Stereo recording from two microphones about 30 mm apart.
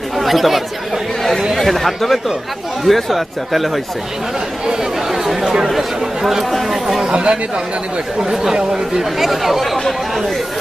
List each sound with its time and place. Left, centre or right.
0.2 s speech: centre
4.8 s chatter: centre
6.5 s speech: centre
7.1 s speech: right
8.2 s speech: centre